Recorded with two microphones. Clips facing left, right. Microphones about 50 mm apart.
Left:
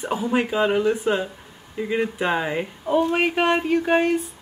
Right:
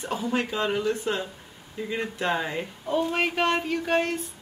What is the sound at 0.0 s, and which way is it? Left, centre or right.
Speech, centre.